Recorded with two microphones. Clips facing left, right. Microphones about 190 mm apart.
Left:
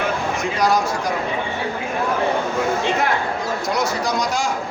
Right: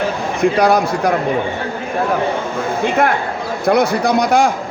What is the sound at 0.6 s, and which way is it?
Speech, 60° right (ahead or behind).